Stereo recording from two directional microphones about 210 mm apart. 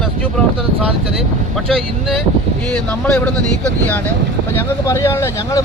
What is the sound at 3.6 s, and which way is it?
Speech, 10° left (ahead or behind).